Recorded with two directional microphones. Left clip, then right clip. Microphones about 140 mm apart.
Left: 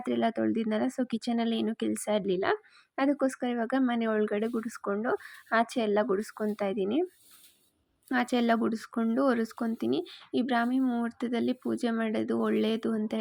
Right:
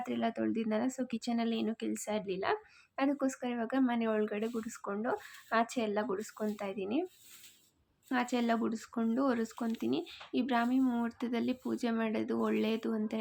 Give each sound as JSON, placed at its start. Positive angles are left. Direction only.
{"t": 0.0, "sound": "speech", "side_deg": 40}
{"t": 8.1, "sound": "speech", "side_deg": 45}